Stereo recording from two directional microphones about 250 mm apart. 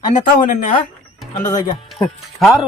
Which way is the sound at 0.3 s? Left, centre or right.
Left.